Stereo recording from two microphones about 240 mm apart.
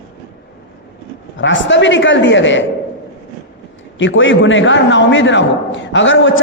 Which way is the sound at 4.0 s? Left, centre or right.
Left.